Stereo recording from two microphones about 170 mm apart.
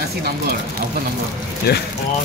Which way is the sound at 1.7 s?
70° left (ahead or behind).